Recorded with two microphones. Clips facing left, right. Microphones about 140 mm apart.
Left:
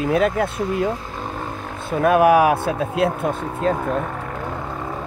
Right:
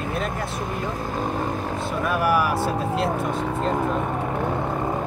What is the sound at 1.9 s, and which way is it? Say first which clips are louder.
Speech: left 9 dB; 60° left (ahead or behind).